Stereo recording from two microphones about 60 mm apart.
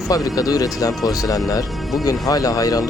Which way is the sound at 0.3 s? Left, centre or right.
Left.